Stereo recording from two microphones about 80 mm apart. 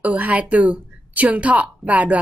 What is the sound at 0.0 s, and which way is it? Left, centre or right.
A woman's voice, centre.